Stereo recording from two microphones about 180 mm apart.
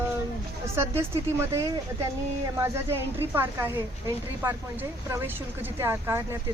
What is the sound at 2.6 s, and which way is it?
A woman's voice, 15° right (ahead or behind).